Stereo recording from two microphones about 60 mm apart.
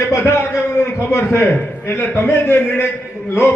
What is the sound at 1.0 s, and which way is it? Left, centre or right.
A man's voice, left.